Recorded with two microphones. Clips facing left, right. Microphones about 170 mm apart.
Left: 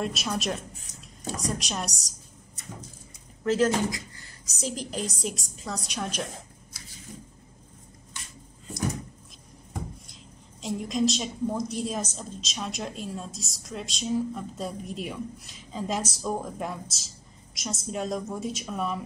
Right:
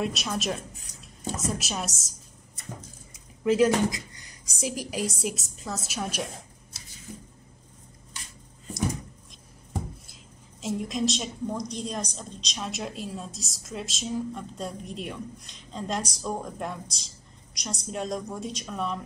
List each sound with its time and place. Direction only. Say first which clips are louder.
0.0 s a woman's voice: even; centre (ahead or behind)
3.4 s a woman's voice: right 2 dB; 10° right (ahead or behind)
10.6 s a woman's voice: left 2 dB; centre (ahead or behind)